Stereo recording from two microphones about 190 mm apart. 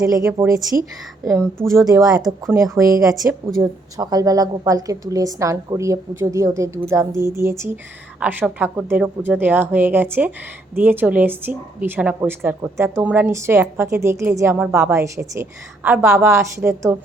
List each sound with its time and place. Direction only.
0.0 s a woman's voice: 15° right (ahead or behind)
2.2 s a woman's voice: centre (ahead or behind)